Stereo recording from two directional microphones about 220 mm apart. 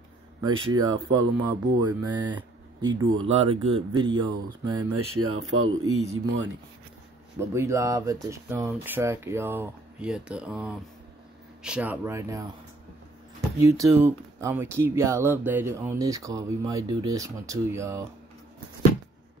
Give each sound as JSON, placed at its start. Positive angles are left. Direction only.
{"t": 0.4, "sound": "speech", "side_deg": -20}
{"t": 4.9, "sound": "speech", "side_deg": -75}
{"t": 7.3, "sound": "speech", "side_deg": -10}
{"t": 13.6, "sound": "speech", "side_deg": -15}